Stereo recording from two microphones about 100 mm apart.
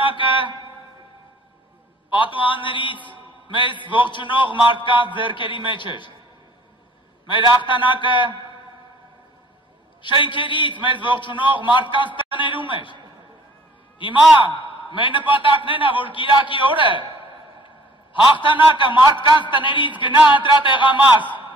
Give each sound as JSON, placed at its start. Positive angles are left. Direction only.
{"t": 0.0, "sound": "a sound", "side_deg": 55}
{"t": 2.1, "sound": "a man's voice", "side_deg": 55}
{"t": 7.2, "sound": "a man's voice", "side_deg": 55}
{"t": 10.0, "sound": "a man's voice", "side_deg": 55}
{"t": 18.4, "sound": "a man's voice", "side_deg": 55}